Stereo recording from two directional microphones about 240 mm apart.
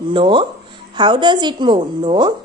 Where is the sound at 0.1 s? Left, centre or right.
Centre.